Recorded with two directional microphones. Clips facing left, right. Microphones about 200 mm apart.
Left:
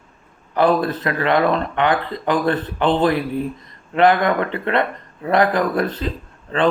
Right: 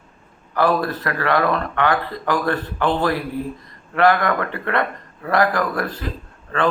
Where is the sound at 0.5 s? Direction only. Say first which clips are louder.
Left 2 dB; 20° left (ahead or behind).